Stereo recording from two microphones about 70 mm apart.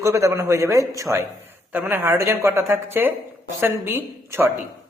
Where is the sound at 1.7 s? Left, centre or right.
Right.